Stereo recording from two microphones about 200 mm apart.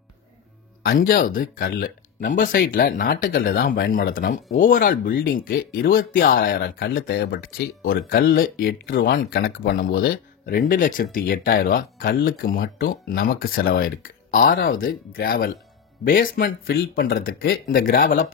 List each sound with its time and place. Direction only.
0.8 s speech: 45° left (ahead or behind)